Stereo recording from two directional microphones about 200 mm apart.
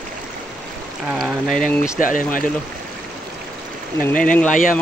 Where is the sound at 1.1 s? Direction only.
Centre (ahead or behind).